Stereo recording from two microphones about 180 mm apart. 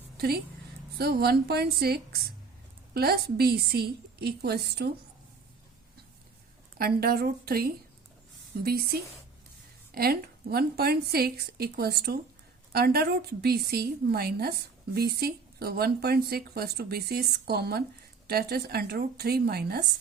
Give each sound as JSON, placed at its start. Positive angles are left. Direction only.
{"t": 0.2, "sound": "a woman's voice", "side_deg": -60}
{"t": 6.7, "sound": "a woman's voice", "side_deg": -60}